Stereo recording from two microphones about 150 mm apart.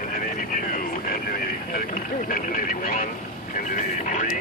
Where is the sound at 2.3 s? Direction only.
70° left (ahead or behind).